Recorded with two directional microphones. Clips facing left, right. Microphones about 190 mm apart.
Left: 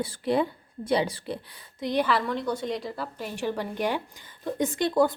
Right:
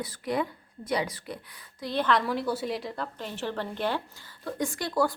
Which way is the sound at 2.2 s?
5° right (ahead or behind).